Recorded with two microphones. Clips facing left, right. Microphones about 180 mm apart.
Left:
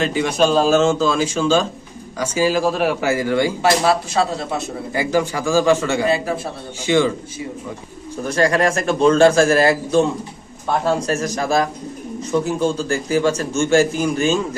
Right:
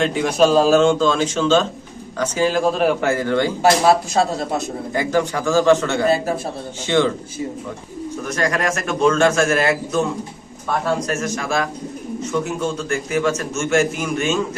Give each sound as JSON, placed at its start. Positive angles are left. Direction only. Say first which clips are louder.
{"t": 0.0, "sound": "a man's voice", "louder": "right 1 dB", "side_deg": 0}
{"t": 3.6, "sound": "speech", "louder": "right 2 dB", "side_deg": -45}
{"t": 4.9, "sound": "a man's voice", "louder": "even", "side_deg": 10}
{"t": 8.2, "sound": "a man's voice", "louder": "left 5 dB", "side_deg": 30}